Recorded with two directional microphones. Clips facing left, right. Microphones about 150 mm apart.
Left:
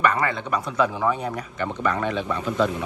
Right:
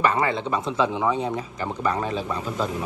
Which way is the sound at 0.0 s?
25° right (ahead or behind).